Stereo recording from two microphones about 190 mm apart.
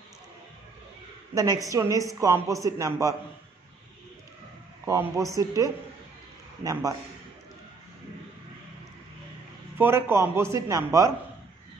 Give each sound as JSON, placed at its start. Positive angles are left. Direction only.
{"t": 1.3, "sound": "a woman's voice", "side_deg": -20}
{"t": 4.8, "sound": "a woman's voice", "side_deg": -15}
{"t": 9.8, "sound": "a woman's voice", "side_deg": -10}